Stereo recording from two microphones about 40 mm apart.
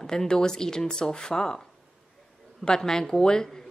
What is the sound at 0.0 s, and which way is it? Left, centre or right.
Speech, centre.